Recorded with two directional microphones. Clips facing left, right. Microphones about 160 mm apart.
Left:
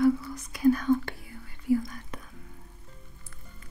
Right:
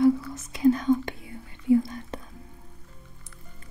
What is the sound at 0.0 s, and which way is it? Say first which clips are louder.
Whispering: right 3 dB; 25° right (ahead or behind).